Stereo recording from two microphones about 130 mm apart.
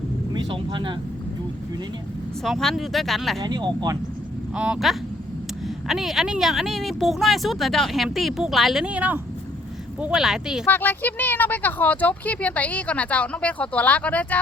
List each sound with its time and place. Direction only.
0.3 s speech: 35° right (ahead or behind)
2.4 s speech: 5° left (ahead or behind)
3.4 s speech: 35° right (ahead or behind)
4.5 s speech: 10° right (ahead or behind)
10.7 s speech: 15° left (ahead or behind)